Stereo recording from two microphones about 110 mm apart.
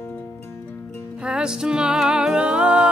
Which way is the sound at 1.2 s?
5° right (ahead or behind).